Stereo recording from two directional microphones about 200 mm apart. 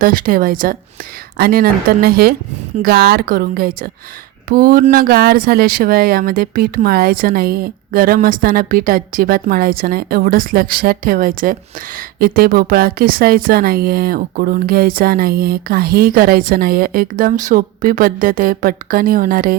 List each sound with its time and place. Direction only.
0.0 s a woman's voice: 45° right (ahead or behind)